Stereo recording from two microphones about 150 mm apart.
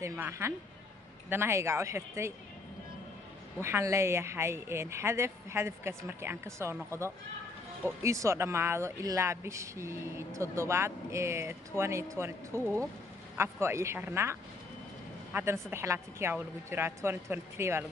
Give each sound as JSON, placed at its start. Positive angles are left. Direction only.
{"t": 0.0, "sound": "speech", "side_deg": -20}
{"t": 3.6, "sound": "speech", "side_deg": -15}